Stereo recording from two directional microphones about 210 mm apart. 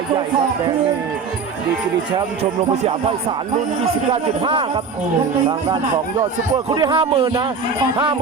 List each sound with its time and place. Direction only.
2.1 s speech: 30° right (ahead or behind)
4.1 s speech: 25° right (ahead or behind)
6.7 s speech: 20° right (ahead or behind)